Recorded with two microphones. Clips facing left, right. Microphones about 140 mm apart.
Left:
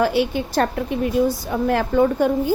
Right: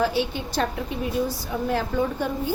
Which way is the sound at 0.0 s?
65° left (ahead or behind).